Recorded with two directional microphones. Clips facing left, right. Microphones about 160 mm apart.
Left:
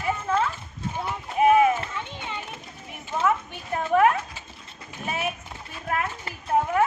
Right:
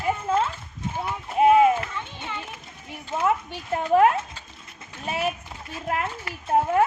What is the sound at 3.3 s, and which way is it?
Speech, 30° right (ahead or behind).